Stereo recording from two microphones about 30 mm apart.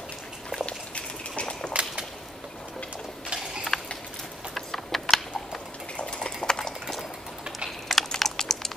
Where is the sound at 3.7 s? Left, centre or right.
Centre.